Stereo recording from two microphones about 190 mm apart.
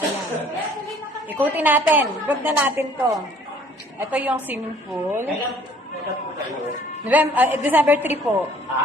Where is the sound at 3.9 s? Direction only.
10° right (ahead or behind).